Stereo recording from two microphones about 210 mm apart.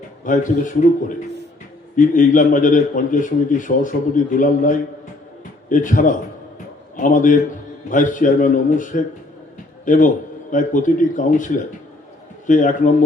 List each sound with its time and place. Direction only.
0.3 s a man's voice: 40° left (ahead or behind)